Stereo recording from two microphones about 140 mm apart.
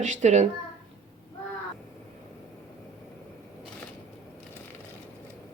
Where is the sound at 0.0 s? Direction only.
60° right (ahead or behind).